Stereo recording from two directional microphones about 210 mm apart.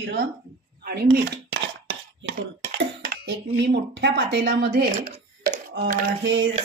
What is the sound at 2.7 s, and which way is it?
Speech, 50° right (ahead or behind).